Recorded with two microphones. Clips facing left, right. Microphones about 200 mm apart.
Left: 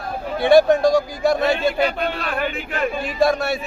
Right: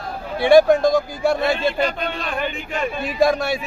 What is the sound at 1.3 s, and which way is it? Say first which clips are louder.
Speech: left 1 dB; 10° left (ahead or behind).